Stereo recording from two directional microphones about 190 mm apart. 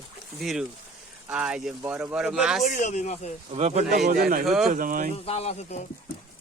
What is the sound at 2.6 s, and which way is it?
Speech, 40° left (ahead or behind).